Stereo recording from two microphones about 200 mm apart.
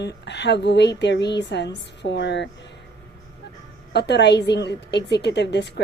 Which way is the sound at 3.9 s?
55° left (ahead or behind).